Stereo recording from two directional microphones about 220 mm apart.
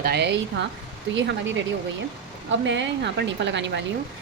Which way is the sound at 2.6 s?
55° right (ahead or behind).